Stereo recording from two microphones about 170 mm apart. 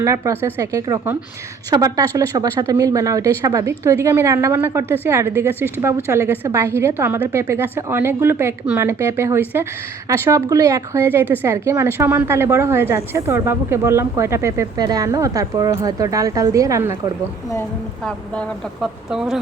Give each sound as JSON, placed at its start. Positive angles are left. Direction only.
{"t": 0.0, "sound": "a woman's voice", "side_deg": -15}
{"t": 18.0, "sound": "speech", "side_deg": 0}